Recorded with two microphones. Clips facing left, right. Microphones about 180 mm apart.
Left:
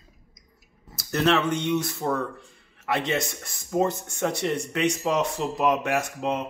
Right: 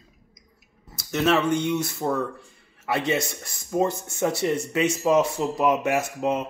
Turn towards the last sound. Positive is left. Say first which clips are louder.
# right 2 dB
turn(degrees=-5)  # may be behind; listen again after turning